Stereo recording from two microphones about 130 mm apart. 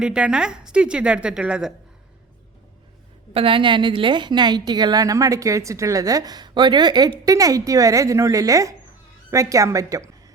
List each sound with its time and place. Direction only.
0.0 s a woman's voice: 5° right (ahead or behind)
3.3 s a woman's voice: 45° right (ahead or behind); by 10.3 s 25° right (ahead or behind)